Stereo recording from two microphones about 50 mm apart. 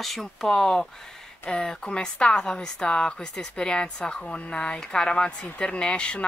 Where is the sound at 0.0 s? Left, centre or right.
Centre.